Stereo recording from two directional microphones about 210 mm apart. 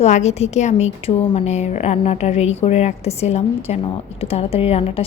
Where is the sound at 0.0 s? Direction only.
30° left (ahead or behind).